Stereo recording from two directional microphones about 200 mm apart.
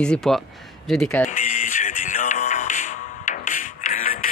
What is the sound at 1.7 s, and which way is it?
Music, 40° left (ahead or behind).